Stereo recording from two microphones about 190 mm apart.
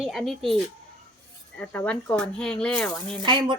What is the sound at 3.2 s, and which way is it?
Sizzle, 25° right (ahead or behind).